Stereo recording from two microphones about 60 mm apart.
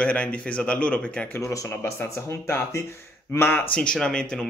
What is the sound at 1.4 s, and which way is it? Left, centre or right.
Speech, left.